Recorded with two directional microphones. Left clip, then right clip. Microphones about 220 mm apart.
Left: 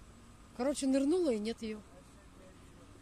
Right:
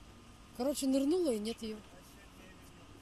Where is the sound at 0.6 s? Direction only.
Centre (ahead or behind).